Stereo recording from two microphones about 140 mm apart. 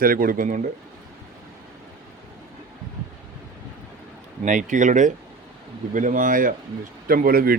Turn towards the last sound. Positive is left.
turn(degrees=-90)